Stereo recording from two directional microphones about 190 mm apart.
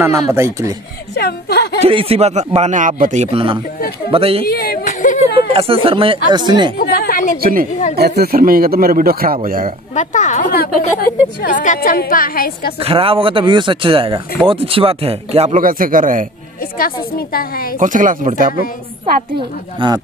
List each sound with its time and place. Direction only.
0.0 s speech: 15° right (ahead or behind)
1.1 s a woman's voice: 60° left (ahead or behind)
1.8 s a man's voice: 30° right (ahead or behind)
4.5 s speech: 50° left (ahead or behind)
4.8 s a sound: 40° left (ahead or behind)
5.5 s speech: 30° right (ahead or behind)
6.8 s a woman's voice: 50° left (ahead or behind)
7.3 s a man's voice: 50° right (ahead or behind)
9.9 s a woman's voice: 40° left (ahead or behind)
12.8 s a man's voice: 30° right (ahead or behind); by 16.3 s 45° right (ahead or behind)
16.7 s a woman's voice: 50° left (ahead or behind)
17.7 s a man's voice: 45° right (ahead or behind)
19.8 s speech: 25° right (ahead or behind)